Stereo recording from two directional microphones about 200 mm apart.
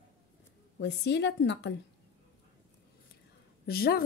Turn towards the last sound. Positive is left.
turn(degrees=50)  # may be behind; listen again after turning